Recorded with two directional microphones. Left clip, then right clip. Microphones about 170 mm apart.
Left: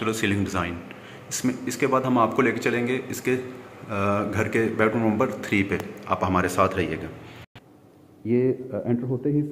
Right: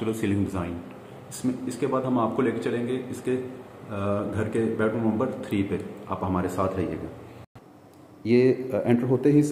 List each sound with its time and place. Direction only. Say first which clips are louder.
0.0 s speech: left 2 dB; 10° right (ahead or behind)
2.0 s a man's voice: left 4 dB; 10° left (ahead or behind)
8.3 s speech: right 3 dB; 20° right (ahead or behind)